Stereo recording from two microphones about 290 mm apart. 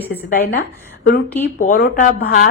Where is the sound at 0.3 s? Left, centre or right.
Left.